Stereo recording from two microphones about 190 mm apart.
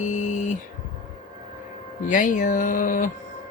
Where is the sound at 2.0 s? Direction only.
45° left (ahead or behind).